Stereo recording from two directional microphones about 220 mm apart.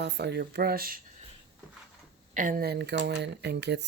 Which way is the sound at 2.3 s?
40° right (ahead or behind).